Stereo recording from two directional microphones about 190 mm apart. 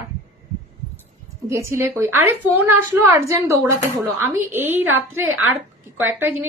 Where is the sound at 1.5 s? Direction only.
10° right (ahead or behind).